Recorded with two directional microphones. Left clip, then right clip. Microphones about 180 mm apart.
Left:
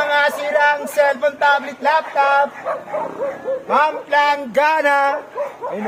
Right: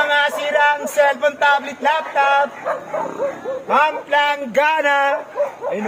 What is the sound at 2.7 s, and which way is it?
Speech, 55° right (ahead or behind).